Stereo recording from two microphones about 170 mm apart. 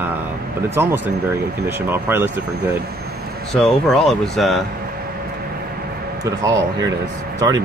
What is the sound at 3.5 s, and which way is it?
Speech, centre (ahead or behind).